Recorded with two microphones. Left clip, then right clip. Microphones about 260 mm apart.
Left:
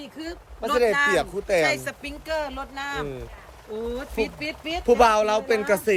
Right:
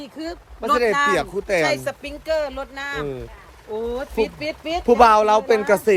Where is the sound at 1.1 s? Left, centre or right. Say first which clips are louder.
Right 2 dB; right.